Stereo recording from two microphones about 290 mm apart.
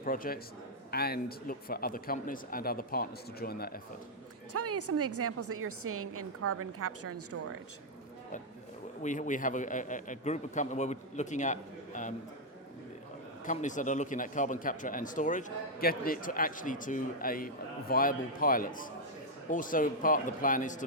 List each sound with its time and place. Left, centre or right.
0.0 s speech: left
4.5 s a woman's voice: right
9.0 s speech: left
13.4 s speech: left